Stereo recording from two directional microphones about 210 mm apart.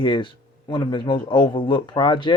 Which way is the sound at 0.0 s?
25° left (ahead or behind).